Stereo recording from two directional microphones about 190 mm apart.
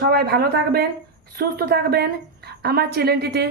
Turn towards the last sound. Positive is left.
turn(degrees=-55)  # may be behind; listen again after turning